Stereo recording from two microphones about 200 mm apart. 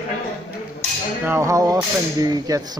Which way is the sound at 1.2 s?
15° right (ahead or behind).